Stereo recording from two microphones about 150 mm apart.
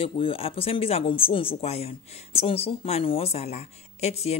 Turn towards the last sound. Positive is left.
turn(degrees=45)  # may be behind; listen again after turning